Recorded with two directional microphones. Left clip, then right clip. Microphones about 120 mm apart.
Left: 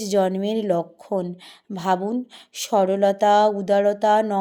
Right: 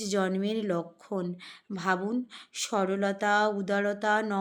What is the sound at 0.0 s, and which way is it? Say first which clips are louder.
A woman's voice: left 9 dB; 35° left (ahead or behind).